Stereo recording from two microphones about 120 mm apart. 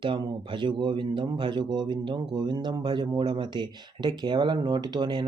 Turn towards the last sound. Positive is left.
turn(degrees=-40)  # may be behind; listen again after turning